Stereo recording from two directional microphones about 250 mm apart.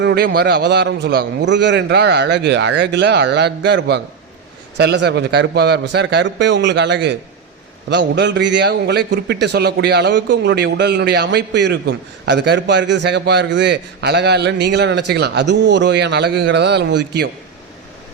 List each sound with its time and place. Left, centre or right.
0.0 s a man's voice: right